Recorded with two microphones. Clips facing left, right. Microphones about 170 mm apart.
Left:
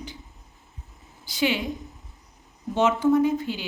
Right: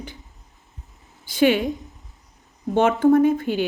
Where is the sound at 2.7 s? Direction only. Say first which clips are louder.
Right 4 dB; 55° right (ahead or behind).